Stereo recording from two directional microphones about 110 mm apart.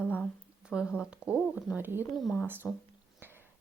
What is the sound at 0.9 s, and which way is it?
Speech, 10° right (ahead or behind).